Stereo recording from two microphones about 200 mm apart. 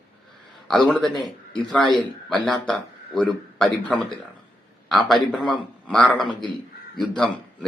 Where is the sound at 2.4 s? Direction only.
Centre (ahead or behind).